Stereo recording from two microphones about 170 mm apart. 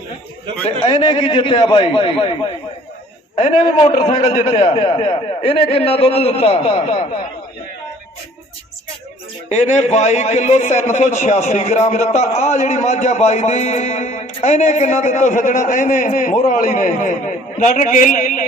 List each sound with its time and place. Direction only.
0.8 s a man's voice: 30° left (ahead or behind)
9.5 s a man's voice: 45° left (ahead or behind)